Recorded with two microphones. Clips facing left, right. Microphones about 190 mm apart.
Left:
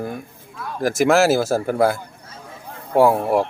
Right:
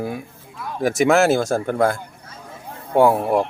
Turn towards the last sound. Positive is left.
turn(degrees=0)  # may be behind; listen again after turning